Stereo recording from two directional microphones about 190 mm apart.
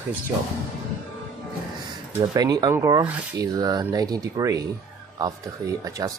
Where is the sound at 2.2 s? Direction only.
20° right (ahead or behind).